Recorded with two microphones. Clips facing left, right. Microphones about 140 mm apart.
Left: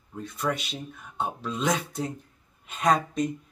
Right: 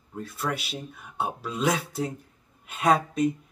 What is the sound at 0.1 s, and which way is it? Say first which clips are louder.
Speech: left 1 dB; 5° right (ahead or behind).